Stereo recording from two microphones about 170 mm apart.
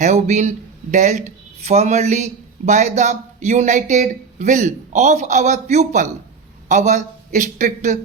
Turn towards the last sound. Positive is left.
turn(degrees=-45)  # may be behind; listen again after turning